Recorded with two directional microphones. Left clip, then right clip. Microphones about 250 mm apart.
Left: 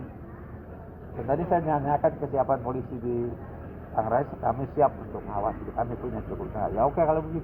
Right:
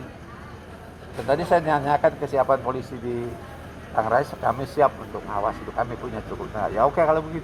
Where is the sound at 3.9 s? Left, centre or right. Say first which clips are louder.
Right 4 dB; right.